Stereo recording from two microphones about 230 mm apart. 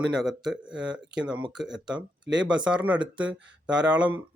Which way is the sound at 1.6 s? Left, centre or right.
Centre.